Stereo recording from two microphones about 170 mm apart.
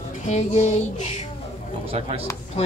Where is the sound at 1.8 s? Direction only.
35° right (ahead or behind).